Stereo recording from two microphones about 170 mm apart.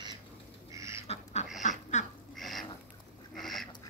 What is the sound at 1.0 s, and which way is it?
Dog, 40° left (ahead or behind).